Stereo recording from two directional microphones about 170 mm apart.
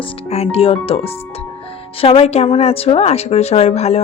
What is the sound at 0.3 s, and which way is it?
Speech, 35° left (ahead or behind).